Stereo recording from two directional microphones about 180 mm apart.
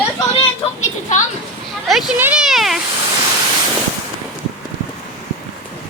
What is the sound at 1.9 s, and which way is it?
Speech, 5° right (ahead or behind).